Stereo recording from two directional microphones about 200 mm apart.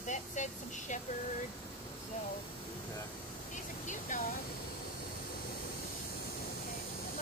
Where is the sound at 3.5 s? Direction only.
40° left (ahead or behind).